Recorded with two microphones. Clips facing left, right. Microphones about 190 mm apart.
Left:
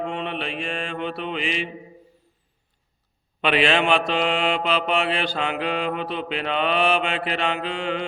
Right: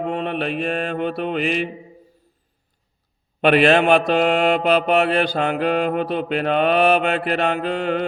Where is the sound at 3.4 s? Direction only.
50° right (ahead or behind).